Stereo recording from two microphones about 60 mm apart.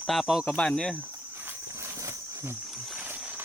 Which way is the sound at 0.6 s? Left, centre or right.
Centre.